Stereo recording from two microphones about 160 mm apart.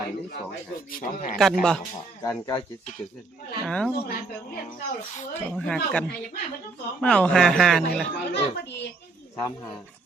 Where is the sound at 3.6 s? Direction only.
5° left (ahead or behind).